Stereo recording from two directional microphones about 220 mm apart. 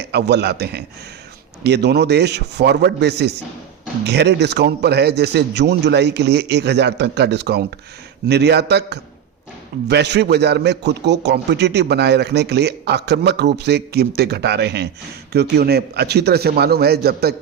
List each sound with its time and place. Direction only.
0.0 s a man's voice: 50° right (ahead or behind)